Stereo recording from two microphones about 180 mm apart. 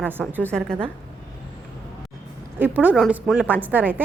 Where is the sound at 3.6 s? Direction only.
10° right (ahead or behind).